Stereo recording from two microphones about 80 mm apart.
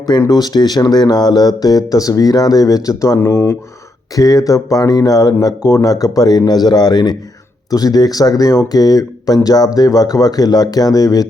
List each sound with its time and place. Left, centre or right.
0.3 s speech: left
3.2 s speech: left
4.1 s speech: left
7.7 s speech: left